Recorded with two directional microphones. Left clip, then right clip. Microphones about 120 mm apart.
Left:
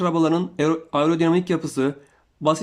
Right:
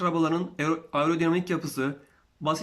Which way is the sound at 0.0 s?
30° left (ahead or behind).